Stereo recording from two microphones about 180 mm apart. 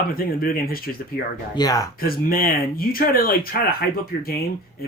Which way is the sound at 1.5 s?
20° left (ahead or behind).